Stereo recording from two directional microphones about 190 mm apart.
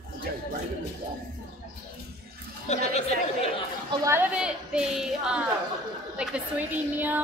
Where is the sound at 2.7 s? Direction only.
35° left (ahead or behind).